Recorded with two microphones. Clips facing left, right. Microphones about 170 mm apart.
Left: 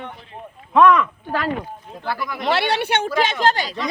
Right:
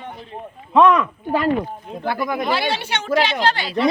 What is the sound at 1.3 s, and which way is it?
Speech, 20° right (ahead or behind).